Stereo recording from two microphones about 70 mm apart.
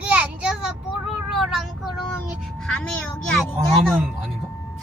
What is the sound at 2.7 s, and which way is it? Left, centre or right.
Speech, centre.